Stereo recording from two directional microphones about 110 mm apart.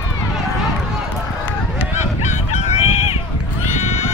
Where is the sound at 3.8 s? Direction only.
90° left.